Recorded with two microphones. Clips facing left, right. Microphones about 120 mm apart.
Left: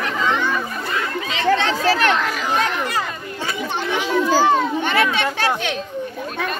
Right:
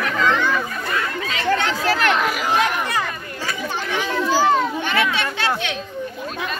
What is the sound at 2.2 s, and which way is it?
Speech, 15° right (ahead or behind).